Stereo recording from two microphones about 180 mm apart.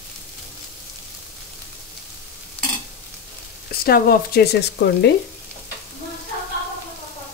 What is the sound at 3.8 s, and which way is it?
Speech, 55° left (ahead or behind).